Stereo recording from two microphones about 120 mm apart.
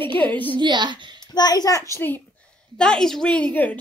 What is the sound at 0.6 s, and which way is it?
Speech, 40° right (ahead or behind).